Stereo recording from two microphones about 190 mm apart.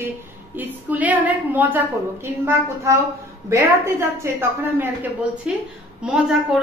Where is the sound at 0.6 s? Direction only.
10° right (ahead or behind).